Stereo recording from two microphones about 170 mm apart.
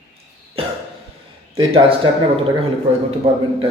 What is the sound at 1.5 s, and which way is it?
Speech, 35° right (ahead or behind).